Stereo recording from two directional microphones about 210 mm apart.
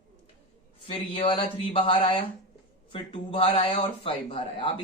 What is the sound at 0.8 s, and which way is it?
Speech, 25° left (ahead or behind).